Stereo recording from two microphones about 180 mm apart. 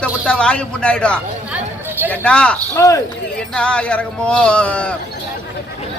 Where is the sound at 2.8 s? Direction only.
20° left (ahead or behind).